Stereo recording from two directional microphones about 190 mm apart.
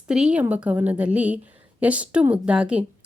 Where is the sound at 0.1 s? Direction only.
5° right (ahead or behind).